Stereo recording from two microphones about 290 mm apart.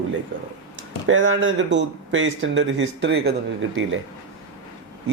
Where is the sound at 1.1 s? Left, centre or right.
Right.